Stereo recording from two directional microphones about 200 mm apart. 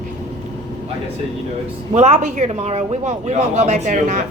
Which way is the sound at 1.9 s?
35° right (ahead or behind).